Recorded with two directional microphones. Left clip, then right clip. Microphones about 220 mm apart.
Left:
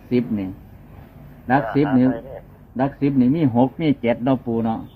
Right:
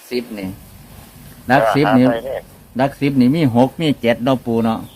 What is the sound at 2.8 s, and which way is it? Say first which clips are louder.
A man's voice: right 4 dB; 30° right (ahead or behind).